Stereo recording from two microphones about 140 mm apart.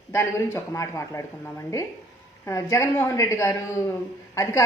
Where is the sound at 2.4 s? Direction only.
20° left (ahead or behind).